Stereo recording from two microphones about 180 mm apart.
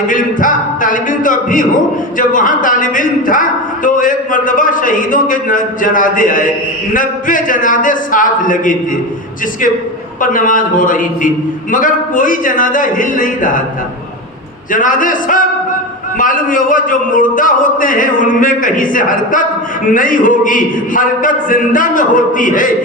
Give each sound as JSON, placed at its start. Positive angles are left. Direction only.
{"t": 0.1, "sound": "a man's voice", "side_deg": 50}
{"t": 10.2, "sound": "a man's voice", "side_deg": 50}
{"t": 14.7, "sound": "a man's voice", "side_deg": 50}